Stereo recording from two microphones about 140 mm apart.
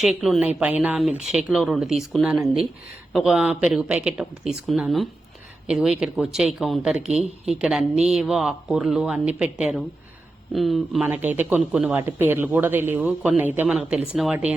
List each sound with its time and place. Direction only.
0.0 s speech: centre (ahead or behind)
11.0 s speech: 10° right (ahead or behind)